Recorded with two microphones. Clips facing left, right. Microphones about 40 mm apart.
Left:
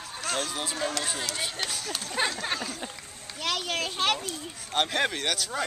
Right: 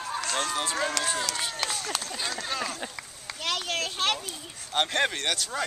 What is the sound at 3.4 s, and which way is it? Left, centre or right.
Speech, centre.